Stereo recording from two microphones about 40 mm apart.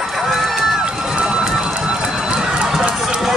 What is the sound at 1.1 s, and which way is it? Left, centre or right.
Run, centre.